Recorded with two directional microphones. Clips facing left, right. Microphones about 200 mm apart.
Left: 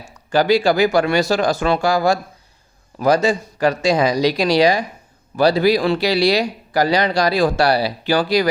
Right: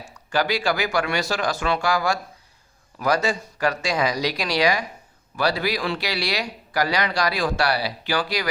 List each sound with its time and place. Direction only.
0.3 s speech: 30° left (ahead or behind)